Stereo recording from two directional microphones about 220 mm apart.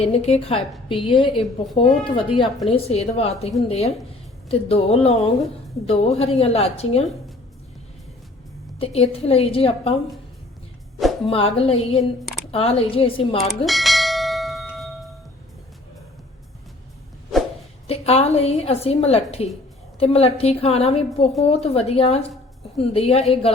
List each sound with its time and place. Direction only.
0.0 s a woman's voice: 30° left (ahead or behind)
8.8 s a woman's voice: 25° left (ahead or behind)
11.3 s a woman's voice: 25° left (ahead or behind)
13.5 s bell: centre (ahead or behind)
17.8 s a woman's voice: 25° left (ahead or behind)